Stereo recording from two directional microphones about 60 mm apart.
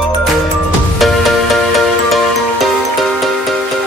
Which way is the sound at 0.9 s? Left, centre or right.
Centre.